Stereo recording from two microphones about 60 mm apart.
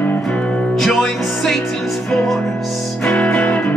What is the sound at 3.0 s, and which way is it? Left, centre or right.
Music, left.